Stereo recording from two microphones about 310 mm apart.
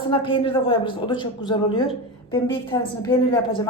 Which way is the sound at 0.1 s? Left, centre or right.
Centre.